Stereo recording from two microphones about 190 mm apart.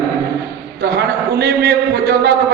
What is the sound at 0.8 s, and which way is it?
A woman's voice, 55° right (ahead or behind).